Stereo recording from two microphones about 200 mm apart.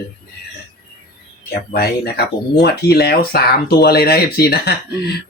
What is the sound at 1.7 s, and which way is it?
Speech, 50° left (ahead or behind).